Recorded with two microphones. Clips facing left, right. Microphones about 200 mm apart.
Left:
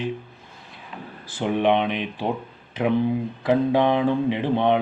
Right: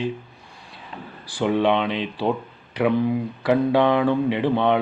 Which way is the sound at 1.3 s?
20° left (ahead or behind).